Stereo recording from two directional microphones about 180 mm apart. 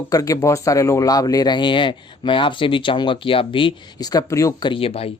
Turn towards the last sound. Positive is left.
turn(degrees=30)  # may be behind; listen again after turning